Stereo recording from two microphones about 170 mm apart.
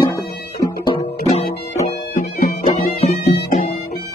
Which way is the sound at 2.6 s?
45° left (ahead or behind).